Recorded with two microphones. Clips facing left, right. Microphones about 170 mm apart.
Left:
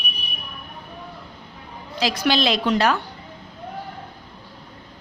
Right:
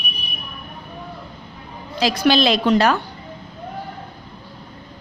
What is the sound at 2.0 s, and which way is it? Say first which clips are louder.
Speech: right 4 dB; 40° right (ahead or behind).